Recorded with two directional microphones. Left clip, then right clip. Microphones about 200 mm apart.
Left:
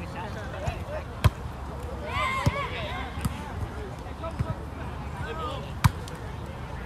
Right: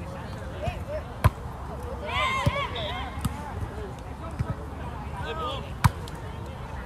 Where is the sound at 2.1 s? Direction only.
35° right (ahead or behind).